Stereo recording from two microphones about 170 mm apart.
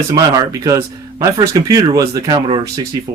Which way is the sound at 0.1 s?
20° right (ahead or behind).